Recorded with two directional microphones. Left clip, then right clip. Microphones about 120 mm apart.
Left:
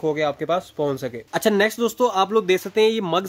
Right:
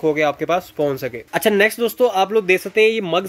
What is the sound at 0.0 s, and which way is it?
Speech, 40° left (ahead or behind).